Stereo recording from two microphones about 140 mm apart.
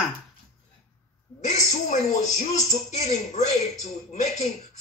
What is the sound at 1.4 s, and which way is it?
Speech, 60° left (ahead or behind).